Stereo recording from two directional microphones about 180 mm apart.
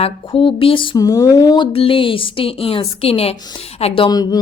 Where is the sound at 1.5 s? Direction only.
30° left (ahead or behind).